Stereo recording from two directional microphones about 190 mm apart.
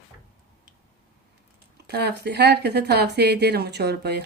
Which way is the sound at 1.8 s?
60° right (ahead or behind).